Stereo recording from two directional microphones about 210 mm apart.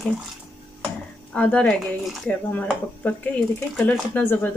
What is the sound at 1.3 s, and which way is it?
Speech, 5° left (ahead or behind).